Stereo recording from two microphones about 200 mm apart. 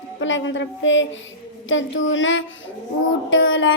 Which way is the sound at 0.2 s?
65° left (ahead or behind).